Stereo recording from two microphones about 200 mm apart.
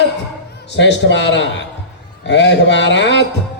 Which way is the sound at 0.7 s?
60° left (ahead or behind).